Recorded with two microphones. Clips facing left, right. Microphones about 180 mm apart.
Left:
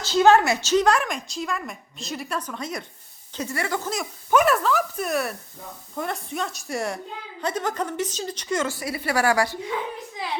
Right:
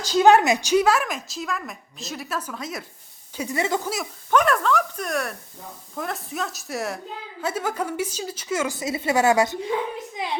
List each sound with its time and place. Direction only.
0.0 s a woman's voice: 15° right (ahead or behind)
3.3 s a woman's voice: 15° right (ahead or behind)
4.3 s a woman's voice: 5° left (ahead or behind)
8.7 s a woman's voice: 20° right (ahead or behind)